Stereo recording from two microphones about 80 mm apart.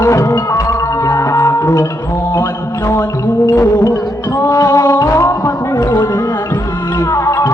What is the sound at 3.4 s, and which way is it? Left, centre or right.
Music, left.